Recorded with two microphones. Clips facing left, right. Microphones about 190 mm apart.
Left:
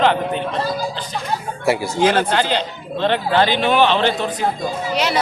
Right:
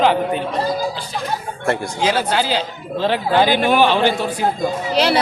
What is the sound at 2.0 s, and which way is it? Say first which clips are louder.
Speech: left 4 dB; 55° left (ahead or behind).